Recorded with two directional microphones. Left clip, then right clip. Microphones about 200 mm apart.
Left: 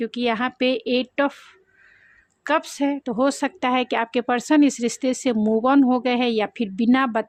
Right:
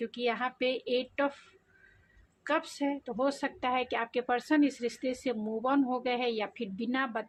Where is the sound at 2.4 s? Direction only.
50° left (ahead or behind).